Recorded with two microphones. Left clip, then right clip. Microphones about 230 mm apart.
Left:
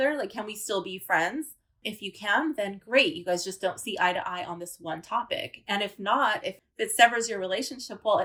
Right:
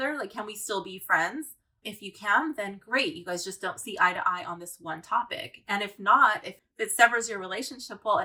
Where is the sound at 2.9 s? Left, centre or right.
Centre.